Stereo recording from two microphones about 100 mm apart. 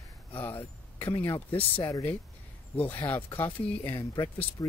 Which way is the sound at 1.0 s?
50° left (ahead or behind).